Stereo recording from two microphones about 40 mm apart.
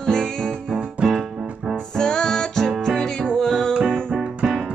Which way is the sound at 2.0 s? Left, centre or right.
Centre.